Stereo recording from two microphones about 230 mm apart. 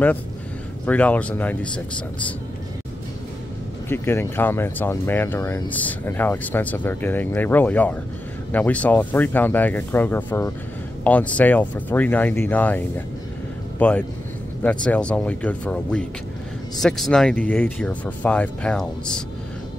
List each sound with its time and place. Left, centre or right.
0.8 s speech: centre
3.9 s speech: centre